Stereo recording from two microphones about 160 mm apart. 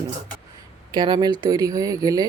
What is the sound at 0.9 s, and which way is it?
Speech, 30° right (ahead or behind).